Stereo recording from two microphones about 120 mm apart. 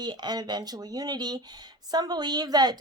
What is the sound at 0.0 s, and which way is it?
Speech, 35° right (ahead or behind).